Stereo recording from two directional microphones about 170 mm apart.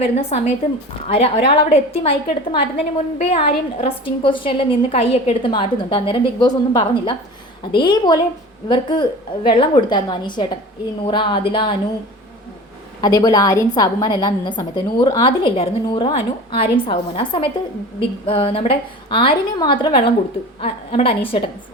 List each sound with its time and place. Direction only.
0.0 s a woman's voice: 35° left (ahead or behind)
13.0 s a woman's voice: 20° left (ahead or behind)